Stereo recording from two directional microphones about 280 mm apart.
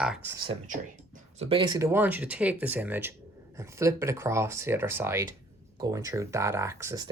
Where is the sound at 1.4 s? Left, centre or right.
Centre.